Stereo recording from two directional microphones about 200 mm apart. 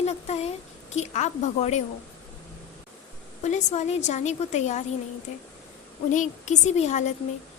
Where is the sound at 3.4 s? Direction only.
35° left (ahead or behind).